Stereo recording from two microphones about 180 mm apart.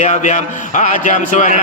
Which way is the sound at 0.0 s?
45° left (ahead or behind).